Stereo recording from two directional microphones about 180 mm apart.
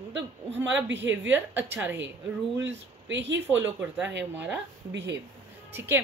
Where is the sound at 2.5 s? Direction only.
80° right.